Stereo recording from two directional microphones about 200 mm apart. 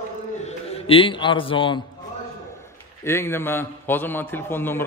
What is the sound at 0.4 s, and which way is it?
A man's voice, 30° left (ahead or behind).